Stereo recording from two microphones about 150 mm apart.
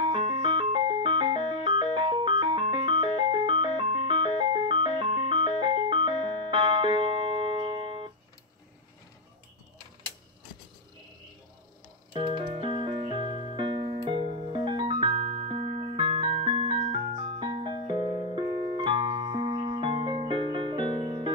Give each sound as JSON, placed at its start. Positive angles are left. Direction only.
{"t": 0.0, "sound": "music", "side_deg": -35}
{"t": 12.1, "sound": "music", "side_deg": -30}